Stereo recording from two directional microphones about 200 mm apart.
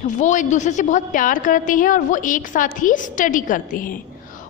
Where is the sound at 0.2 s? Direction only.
40° left (ahead or behind).